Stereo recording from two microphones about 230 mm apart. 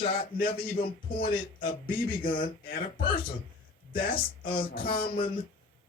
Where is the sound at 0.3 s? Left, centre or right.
Left.